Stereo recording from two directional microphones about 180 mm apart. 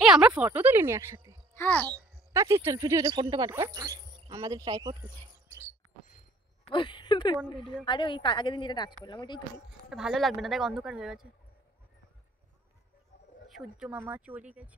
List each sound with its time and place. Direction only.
0.0 s speech: 5° right (ahead or behind)
1.5 s a child's voice: 10° left (ahead or behind)
1.9 s speech: 15° right (ahead or behind)
6.7 s speech: 25° left (ahead or behind)
9.8 s a woman's voice: centre (ahead or behind)
13.5 s speech: 5° right (ahead or behind)